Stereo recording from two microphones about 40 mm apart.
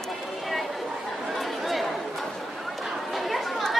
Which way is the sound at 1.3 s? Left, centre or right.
Centre.